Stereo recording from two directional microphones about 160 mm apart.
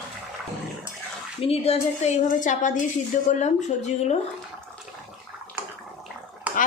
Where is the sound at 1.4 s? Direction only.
40° left (ahead or behind).